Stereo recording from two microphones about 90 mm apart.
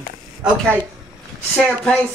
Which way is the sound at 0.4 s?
10° right (ahead or behind).